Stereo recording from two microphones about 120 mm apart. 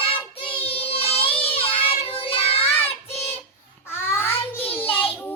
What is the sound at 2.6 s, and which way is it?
Child singing, 15° left (ahead or behind).